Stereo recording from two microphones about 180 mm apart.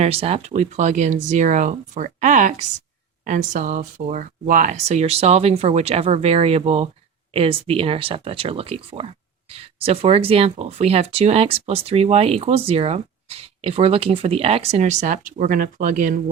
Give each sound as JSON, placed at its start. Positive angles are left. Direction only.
{"t": 0.0, "sound": "speech", "side_deg": -35}